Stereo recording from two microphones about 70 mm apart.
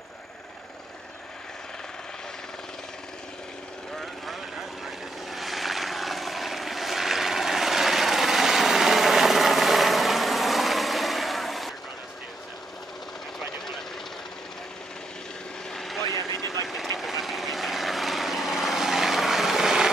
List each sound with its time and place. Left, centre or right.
3.9 s vehicle: centre
15.7 s vehicle: centre
16.0 s vehicle: left
16.6 s vehicle: centre